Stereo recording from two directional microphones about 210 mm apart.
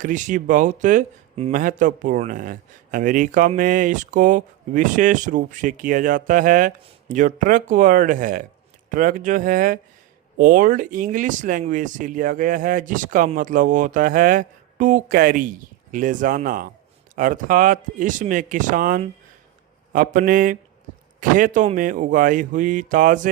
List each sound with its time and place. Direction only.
0.0 s speech: 35° right (ahead or behind)